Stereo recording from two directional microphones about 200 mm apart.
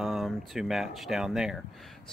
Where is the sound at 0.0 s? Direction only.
Centre (ahead or behind).